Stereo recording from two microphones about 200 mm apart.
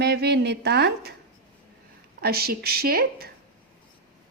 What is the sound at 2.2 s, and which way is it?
Speech, 50° right (ahead or behind).